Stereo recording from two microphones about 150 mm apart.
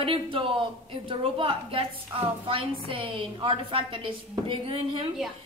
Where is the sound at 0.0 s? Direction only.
35° right (ahead or behind).